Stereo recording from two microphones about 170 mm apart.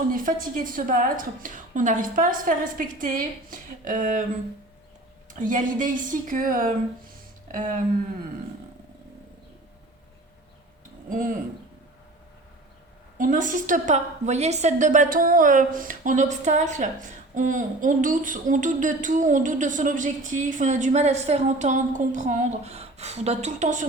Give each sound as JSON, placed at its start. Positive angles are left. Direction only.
{"t": 0.1, "sound": "a woman's voice", "side_deg": -55}
{"t": 5.3, "sound": "a woman's voice", "side_deg": -50}
{"t": 11.1, "sound": "a woman's voice", "side_deg": -50}
{"t": 13.1, "sound": "a woman's voice", "side_deg": -50}